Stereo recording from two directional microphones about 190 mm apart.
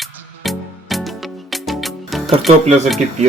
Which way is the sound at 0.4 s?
Centre (ahead or behind).